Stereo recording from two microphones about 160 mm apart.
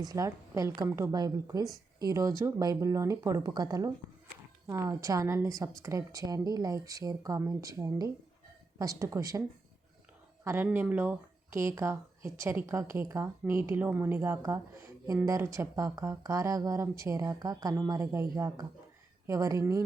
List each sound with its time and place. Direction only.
0.0 s a woman's voice: 25° right (ahead or behind)
10.4 s a woman's voice: 15° right (ahead or behind)